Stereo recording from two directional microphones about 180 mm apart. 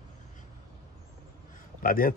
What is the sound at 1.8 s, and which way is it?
Speech, 55° left (ahead or behind).